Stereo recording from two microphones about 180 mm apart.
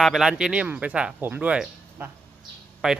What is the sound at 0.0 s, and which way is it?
Speech, centre (ahead or behind).